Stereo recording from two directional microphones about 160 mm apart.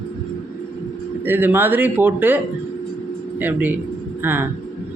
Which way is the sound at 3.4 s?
10° right (ahead or behind).